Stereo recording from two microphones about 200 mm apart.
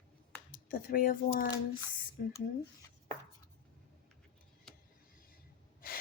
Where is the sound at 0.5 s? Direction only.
45° left (ahead or behind).